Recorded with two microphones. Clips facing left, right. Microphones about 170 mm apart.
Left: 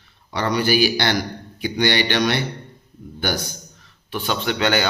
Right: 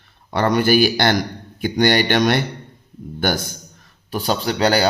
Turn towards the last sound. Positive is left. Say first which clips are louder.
# right 3 dB
turn(degrees=-35)  # may be behind; listen again after turning